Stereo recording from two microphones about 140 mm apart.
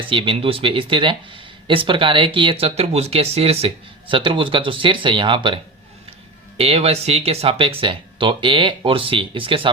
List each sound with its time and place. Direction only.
0.0 s speech: 40° right (ahead or behind)
6.6 s speech: 45° right (ahead or behind)